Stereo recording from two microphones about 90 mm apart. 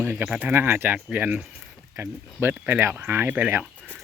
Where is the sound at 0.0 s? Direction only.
25° right (ahead or behind).